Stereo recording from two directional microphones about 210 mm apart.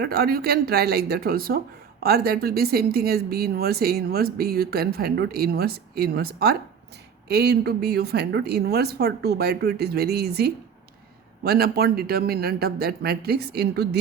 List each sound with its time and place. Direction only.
0.0 s speech: 45° right (ahead or behind)